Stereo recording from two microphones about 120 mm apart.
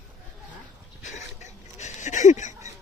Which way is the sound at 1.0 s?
80° left.